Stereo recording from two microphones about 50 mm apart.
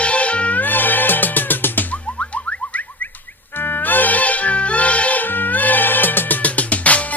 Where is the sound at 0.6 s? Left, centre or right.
Left.